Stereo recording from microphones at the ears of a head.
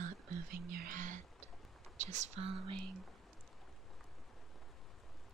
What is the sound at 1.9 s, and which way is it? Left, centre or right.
Speech, right.